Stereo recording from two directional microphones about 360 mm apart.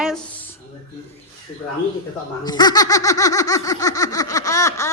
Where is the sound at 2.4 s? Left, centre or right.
Centre.